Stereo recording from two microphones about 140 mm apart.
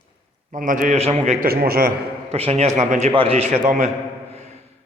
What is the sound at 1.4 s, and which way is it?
Speech, 90° right.